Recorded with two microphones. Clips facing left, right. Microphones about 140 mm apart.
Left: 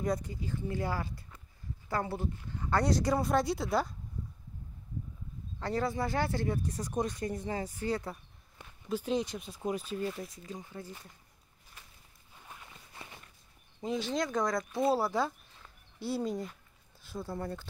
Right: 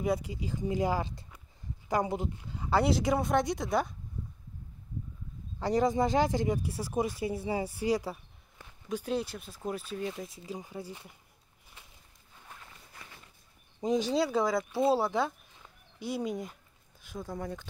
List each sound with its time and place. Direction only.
0.0 s speech: 10° right (ahead or behind)
5.6 s speech: 15° right (ahead or behind)
12.9 s walk: 25° left (ahead or behind)
13.7 s speech: 15° right (ahead or behind)
15.1 s a sound: 15° right (ahead or behind)
16.2 s speech: centre (ahead or behind)